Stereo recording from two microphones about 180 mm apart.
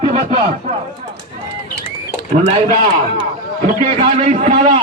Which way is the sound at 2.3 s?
35° right (ahead or behind).